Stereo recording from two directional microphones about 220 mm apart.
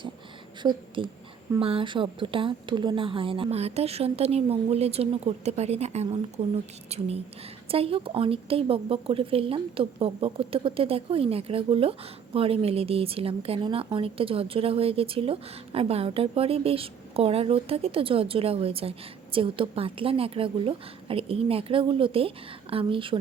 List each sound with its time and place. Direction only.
0.6 s a woman's voice: 20° right (ahead or behind)
7.7 s speech: 25° right (ahead or behind)